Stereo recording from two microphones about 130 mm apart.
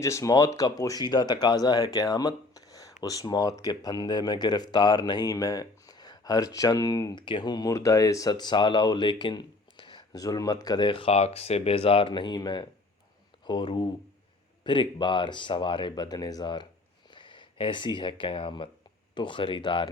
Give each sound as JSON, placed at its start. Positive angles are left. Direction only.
{"t": 0.0, "sound": "speech", "side_deg": 25}
{"t": 7.2, "sound": "speech", "side_deg": 40}